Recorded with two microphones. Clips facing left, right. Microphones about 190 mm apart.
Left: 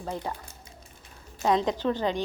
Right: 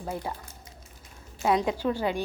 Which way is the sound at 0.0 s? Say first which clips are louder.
Even; 10° right (ahead or behind).